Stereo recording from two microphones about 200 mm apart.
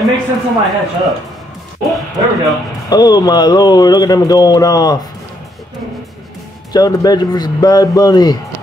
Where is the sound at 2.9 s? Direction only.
20° left (ahead or behind).